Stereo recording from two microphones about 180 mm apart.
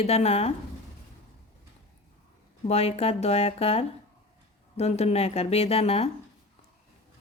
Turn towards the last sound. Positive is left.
turn(degrees=35)  # may be behind; listen again after turning